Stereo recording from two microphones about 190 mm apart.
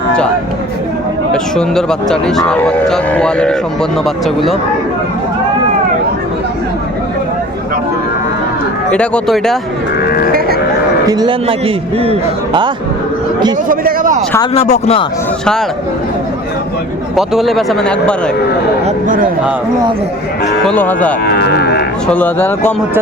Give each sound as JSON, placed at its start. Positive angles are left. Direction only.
{"t": 1.3, "sound": "speech", "side_deg": 5}
{"t": 8.9, "sound": "speech", "side_deg": 5}
{"t": 11.0, "sound": "a man's voice", "side_deg": -20}
{"t": 13.7, "sound": "a man's voice", "side_deg": -45}
{"t": 14.5, "sound": "speech", "side_deg": 30}
{"t": 17.2, "sound": "speech", "side_deg": 0}
{"t": 18.9, "sound": "speech", "side_deg": -45}
{"t": 20.7, "sound": "speech", "side_deg": 10}
{"t": 21.2, "sound": "cattle", "side_deg": 55}
{"t": 22.0, "sound": "speech", "side_deg": 10}